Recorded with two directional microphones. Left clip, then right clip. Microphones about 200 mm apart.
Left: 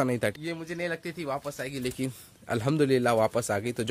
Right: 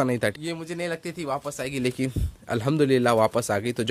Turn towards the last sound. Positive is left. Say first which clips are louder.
# right 4 dB
turn(degrees=-5)  # may be behind; listen again after turning